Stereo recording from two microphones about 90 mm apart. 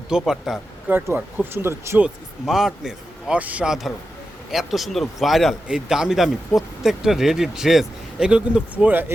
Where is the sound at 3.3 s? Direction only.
15° right (ahead or behind).